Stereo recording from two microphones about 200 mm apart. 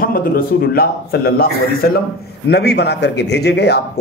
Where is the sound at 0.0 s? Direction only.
45° left (ahead or behind).